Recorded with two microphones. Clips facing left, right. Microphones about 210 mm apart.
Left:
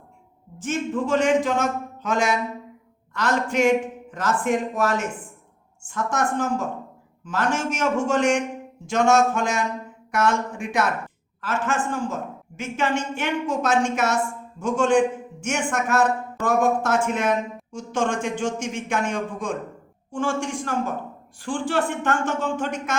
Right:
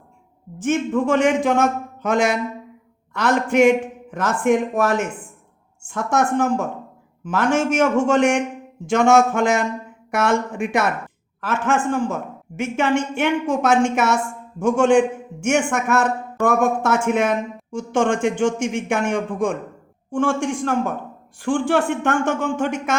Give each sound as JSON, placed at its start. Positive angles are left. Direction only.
{"t": 0.6, "sound": "speech", "side_deg": -55}